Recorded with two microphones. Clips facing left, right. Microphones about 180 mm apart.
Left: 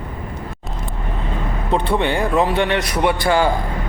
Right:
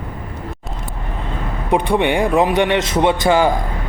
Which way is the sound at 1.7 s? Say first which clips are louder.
Right 3 dB; 15° right (ahead or behind).